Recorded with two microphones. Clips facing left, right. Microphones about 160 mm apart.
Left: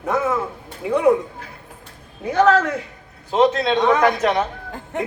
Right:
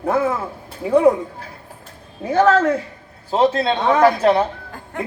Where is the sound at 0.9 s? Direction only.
35° right (ahead or behind).